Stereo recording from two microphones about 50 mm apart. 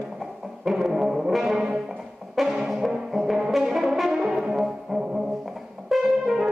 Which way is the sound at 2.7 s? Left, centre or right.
Centre.